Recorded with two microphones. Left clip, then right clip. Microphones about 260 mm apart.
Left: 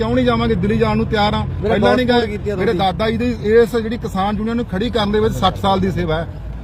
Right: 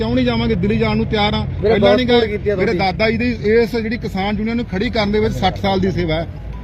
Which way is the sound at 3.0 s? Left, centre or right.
Left.